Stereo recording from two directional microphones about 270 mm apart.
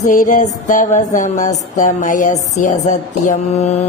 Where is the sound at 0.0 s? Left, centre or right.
Left.